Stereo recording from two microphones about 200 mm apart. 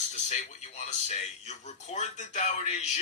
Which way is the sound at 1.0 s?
35° left (ahead or behind).